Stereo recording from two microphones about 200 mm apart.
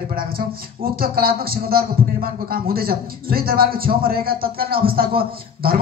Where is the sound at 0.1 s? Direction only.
50° right (ahead or behind).